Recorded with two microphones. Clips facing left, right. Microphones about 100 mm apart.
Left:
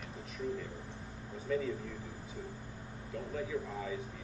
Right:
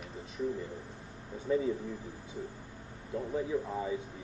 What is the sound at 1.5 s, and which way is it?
Speech, 25° right (ahead or behind).